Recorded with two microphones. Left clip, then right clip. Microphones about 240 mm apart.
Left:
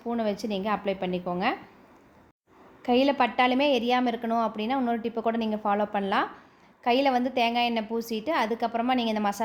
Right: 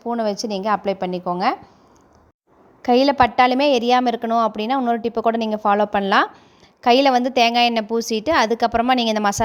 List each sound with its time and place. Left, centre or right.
0.0 s a woman's voice: right
2.8 s a woman's voice: right